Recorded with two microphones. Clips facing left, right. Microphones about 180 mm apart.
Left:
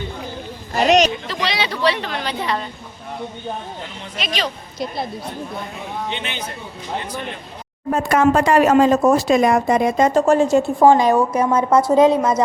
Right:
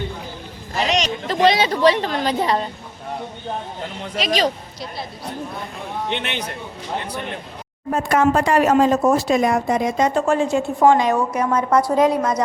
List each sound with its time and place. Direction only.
0.8 s a sound: 45° left (ahead or behind)
1.3 s speech: 45° right (ahead or behind)
4.2 s speech: 40° right (ahead or behind)
6.1 s a man's voice: 70° right (ahead or behind)
8.1 s a woman's voice: 90° left; by 10.1 s 60° left (ahead or behind)
10.2 s a woman's voice: 40° left (ahead or behind); by 12.4 s 25° left (ahead or behind)